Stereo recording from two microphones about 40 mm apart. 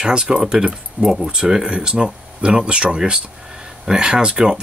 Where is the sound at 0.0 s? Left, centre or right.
Centre.